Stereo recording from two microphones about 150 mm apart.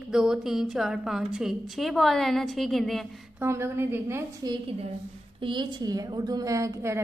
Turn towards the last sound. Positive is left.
turn(degrees=-20)  # may be behind; listen again after turning